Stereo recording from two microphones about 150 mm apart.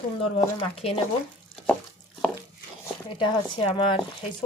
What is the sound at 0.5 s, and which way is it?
Speech, 40° left (ahead or behind).